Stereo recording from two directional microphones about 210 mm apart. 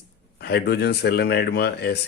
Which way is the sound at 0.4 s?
50° left (ahead or behind).